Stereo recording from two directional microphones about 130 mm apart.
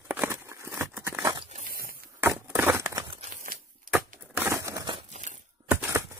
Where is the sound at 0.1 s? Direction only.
15° right (ahead or behind).